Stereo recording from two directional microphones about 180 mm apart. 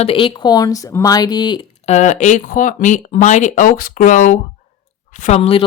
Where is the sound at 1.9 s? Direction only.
40° left (ahead or behind).